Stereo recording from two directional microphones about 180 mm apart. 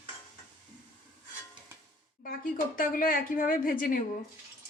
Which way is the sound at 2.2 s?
50° left (ahead or behind).